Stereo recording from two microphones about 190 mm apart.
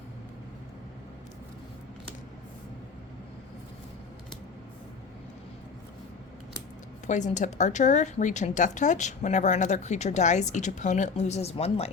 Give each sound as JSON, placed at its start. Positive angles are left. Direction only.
{"t": 7.1, "sound": "a woman's voice", "side_deg": 40}